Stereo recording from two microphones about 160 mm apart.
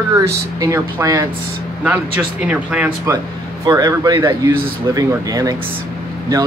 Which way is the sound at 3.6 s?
20° right (ahead or behind).